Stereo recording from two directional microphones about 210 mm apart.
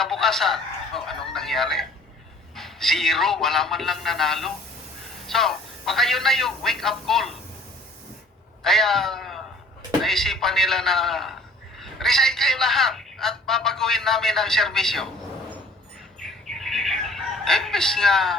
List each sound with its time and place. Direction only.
0.0 s a sound: centre (ahead or behind)
2.6 s a man's voice: centre (ahead or behind)
8.6 s a man's voice: centre (ahead or behind)
16.2 s bird: centre (ahead or behind)